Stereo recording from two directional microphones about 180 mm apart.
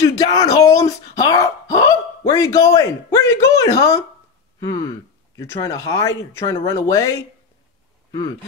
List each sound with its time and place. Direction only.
0.0 s speech: 20° left (ahead or behind)